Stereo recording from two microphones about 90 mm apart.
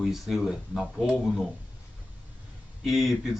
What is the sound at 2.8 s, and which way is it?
Speech, centre (ahead or behind).